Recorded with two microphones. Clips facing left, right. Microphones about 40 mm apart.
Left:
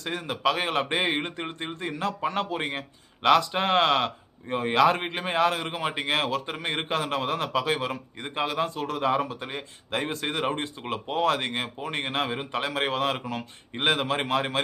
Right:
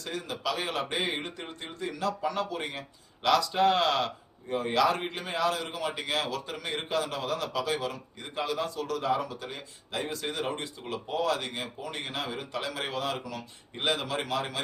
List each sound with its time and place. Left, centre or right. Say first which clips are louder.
0.0 s speech: left 7 dB; left